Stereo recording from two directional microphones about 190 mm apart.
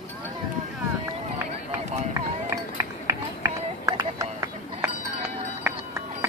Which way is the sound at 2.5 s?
15° right (ahead or behind).